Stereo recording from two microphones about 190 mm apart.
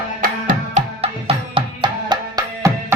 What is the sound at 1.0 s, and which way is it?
Music, 30° right (ahead or behind).